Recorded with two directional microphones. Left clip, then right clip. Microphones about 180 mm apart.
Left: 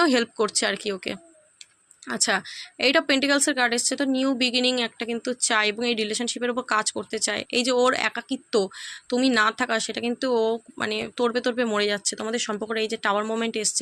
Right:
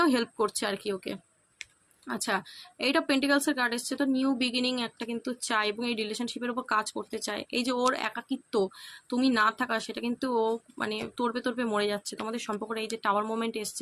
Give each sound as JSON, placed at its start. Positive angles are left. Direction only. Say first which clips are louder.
{"t": 0.0, "sound": "speech", "louder": "left 5 dB", "side_deg": 25}